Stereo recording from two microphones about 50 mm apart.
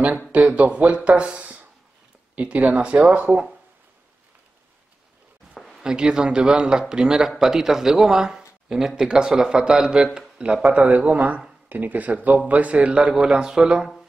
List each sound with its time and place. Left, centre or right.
0.3 s speech: right
5.8 s a man's voice: centre